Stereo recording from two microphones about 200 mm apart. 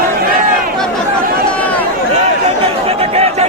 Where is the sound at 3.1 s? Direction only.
30° right (ahead or behind).